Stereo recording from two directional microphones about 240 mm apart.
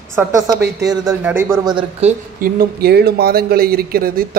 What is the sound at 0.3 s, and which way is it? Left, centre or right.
A woman's voice, centre.